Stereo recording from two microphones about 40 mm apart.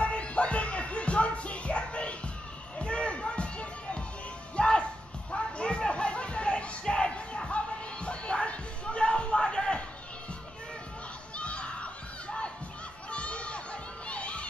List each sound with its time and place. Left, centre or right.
0.0 s music: left
2.8 s a sound: left
4.6 s music: left
11.3 s children shouting: left
13.1 s crowd: left